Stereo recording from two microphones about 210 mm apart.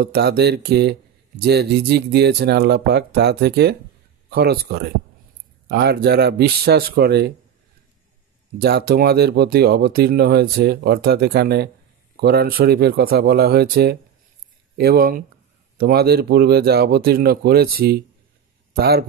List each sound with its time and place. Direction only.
0.0 s speech: 50° right (ahead or behind)
8.5 s speech: 50° right (ahead or behind)